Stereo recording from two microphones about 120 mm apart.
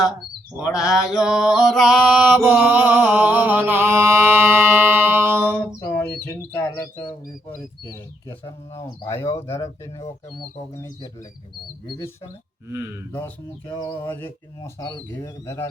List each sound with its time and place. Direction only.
0.6 s mantra: 5° right (ahead or behind)
5.5 s bird: 15° left (ahead or behind)
8.7 s speech: 25° left (ahead or behind)
11.9 s speech: 45° left (ahead or behind)
13.1 s music: 15° left (ahead or behind)
14.1 s speech: 20° left (ahead or behind)